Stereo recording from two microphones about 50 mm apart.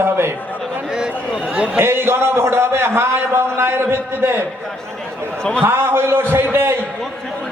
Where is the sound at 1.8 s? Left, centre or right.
Right.